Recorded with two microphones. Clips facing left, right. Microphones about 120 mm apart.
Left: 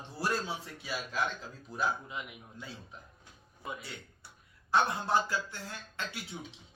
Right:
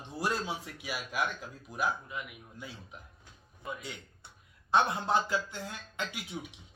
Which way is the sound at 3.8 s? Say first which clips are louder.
Right 2 dB; 20° right (ahead or behind).